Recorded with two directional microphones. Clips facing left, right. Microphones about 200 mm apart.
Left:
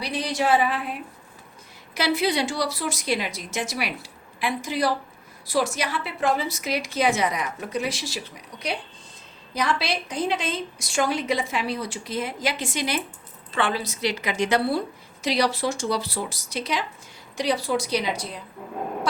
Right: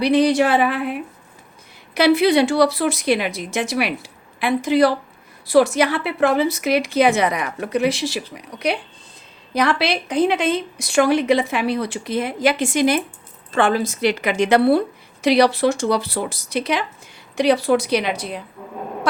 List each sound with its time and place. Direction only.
0.0 s speech: 60° right (ahead or behind)
2.0 s speech: 60° right (ahead or behind)